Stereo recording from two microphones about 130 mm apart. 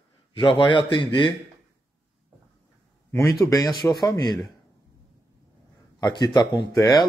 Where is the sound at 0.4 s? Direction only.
40° left (ahead or behind).